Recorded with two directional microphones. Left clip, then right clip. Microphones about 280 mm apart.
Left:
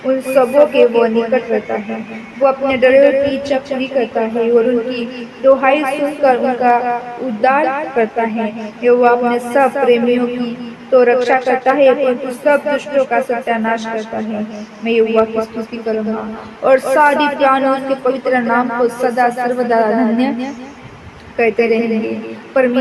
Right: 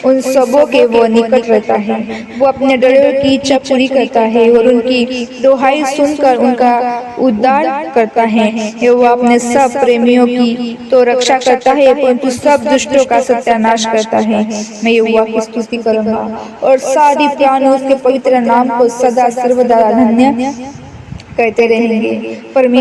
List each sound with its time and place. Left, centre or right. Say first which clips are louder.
0.1 s a man's voice: right 3 dB; right